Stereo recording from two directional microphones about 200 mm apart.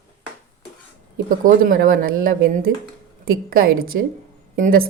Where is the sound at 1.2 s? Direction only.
45° right (ahead or behind).